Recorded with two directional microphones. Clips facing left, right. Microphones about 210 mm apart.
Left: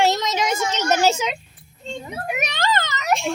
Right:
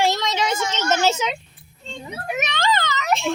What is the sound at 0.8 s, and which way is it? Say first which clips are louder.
Speech: left 1 dB; 15° left (ahead or behind).